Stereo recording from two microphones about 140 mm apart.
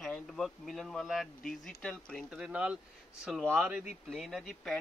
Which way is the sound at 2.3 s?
5° right (ahead or behind).